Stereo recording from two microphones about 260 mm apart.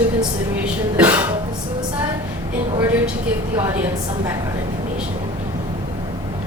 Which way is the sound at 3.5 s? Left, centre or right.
Centre.